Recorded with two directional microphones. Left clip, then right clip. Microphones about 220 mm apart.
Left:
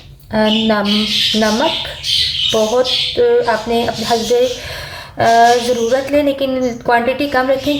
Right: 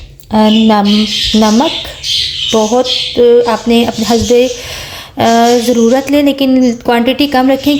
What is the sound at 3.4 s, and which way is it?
Speech, 35° right (ahead or behind).